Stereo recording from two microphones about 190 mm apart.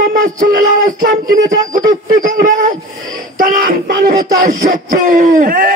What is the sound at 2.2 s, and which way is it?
Speech, 45° right (ahead or behind).